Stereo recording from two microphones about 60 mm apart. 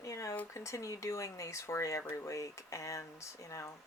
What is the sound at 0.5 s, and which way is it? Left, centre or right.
Speech, left.